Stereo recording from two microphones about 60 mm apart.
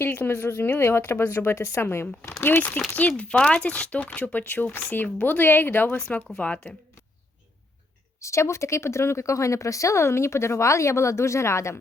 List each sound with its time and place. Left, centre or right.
0.0 s a woman's voice: left
2.4 s speech: left
3.1 s a woman's voice: centre
8.2 s speech: left